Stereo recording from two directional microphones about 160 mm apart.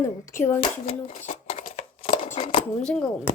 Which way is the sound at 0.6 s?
45° left (ahead or behind).